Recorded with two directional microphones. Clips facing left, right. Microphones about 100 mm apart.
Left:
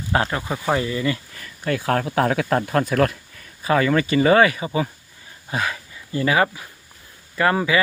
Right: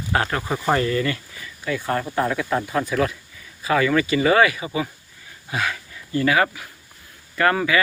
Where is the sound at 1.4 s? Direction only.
60° left (ahead or behind).